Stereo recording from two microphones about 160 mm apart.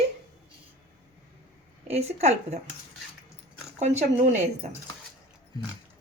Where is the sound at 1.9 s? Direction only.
45° right (ahead or behind).